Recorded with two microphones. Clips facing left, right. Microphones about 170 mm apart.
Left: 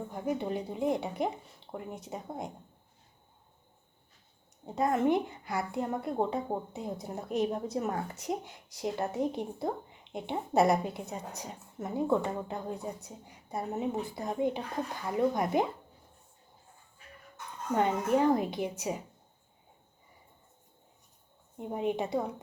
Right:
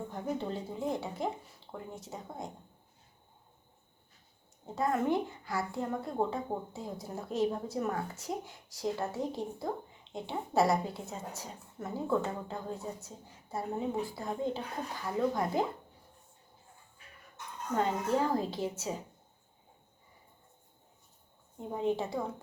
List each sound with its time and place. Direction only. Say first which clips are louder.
0.1 s a woman's voice: left 4 dB; 15° left (ahead or behind)
4.6 s a woman's voice: left 3 dB; 20° left (ahead or behind)
17.7 s a woman's voice: left 3 dB; 20° left (ahead or behind)
21.6 s a woman's voice: left 1 dB; 15° left (ahead or behind)